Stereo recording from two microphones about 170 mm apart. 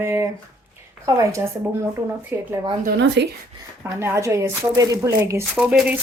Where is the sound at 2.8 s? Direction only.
90° right.